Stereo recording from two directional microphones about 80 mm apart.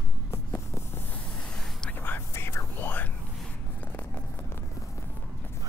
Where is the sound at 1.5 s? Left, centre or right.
Centre.